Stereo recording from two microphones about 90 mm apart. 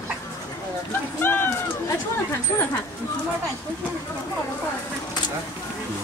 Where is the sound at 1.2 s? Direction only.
25° left (ahead or behind).